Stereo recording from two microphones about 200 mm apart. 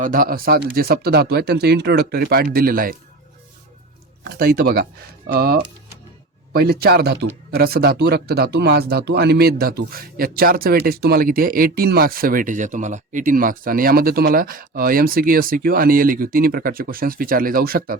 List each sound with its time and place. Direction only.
0.0 s speech: 45° right (ahead or behind)
4.2 s speech: 50° right (ahead or behind)